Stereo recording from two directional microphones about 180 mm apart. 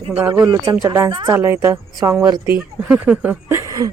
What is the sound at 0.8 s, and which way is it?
Speech, 15° right (ahead or behind).